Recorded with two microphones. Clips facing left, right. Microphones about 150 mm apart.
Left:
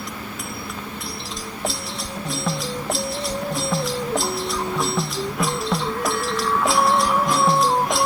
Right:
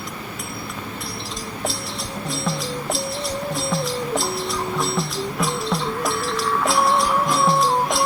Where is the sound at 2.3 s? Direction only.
Centre (ahead or behind).